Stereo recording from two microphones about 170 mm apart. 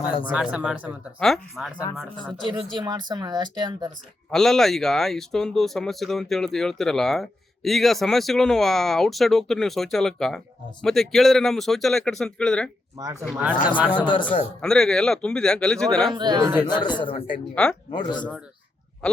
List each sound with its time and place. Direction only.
0.3 s speech: 5° right (ahead or behind)
2.7 s speech: 25° right (ahead or behind)
4.3 s speech: centre (ahead or behind)
13.0 s speech: 20° right (ahead or behind)
13.2 s speech: 5° right (ahead or behind)
13.9 s speech: 30° left (ahead or behind)
14.6 s speech: 5° left (ahead or behind)
16.1 s speech: 25° right (ahead or behind)
16.6 s speech: 25° left (ahead or behind)
17.5 s speech: 5° left (ahead or behind)